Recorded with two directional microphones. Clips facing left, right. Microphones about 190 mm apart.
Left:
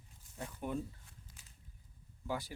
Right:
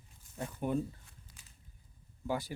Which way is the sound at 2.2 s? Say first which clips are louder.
Right 4 dB; 50° right (ahead or behind).